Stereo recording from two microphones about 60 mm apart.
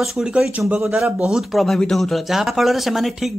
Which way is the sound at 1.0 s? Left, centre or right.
Right.